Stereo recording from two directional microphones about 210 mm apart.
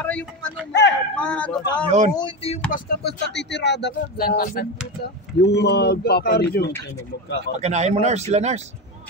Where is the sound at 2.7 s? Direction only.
50° left (ahead or behind).